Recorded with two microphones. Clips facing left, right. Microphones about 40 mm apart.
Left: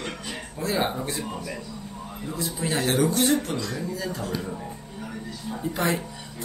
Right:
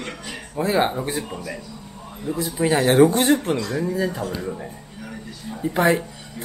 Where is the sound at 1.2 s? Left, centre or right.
Centre.